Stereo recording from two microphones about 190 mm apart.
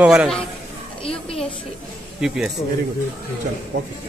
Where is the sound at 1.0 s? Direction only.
30° left (ahead or behind).